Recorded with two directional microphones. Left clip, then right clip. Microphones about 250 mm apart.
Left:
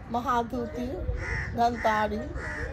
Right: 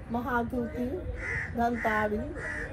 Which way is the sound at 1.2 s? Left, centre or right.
Left.